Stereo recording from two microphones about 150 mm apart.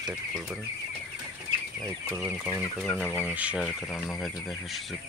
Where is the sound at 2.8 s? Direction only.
5° left (ahead or behind).